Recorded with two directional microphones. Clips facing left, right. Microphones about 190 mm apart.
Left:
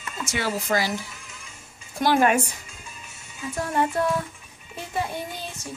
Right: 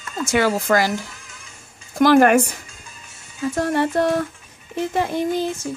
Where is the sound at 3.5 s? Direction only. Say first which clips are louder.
Right 4 dB; 75° right (ahead or behind).